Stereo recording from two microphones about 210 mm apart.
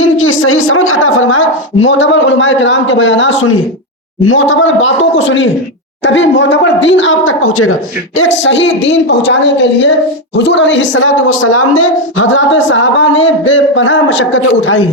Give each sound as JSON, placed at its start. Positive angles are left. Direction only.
{"t": 0.0, "sound": "a woman's voice", "side_deg": 70}
{"t": 8.2, "sound": "a woman's voice", "side_deg": 60}